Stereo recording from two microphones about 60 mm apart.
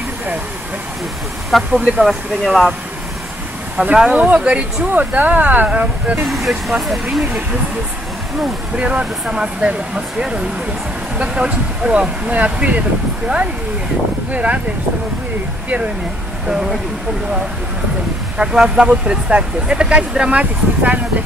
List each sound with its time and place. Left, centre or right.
1.7 s speech: centre
3.8 s speech: centre
6.2 s speech: centre
8.7 s speech: right
14.3 s speech: right
16.4 s speech: centre
18.4 s speech: centre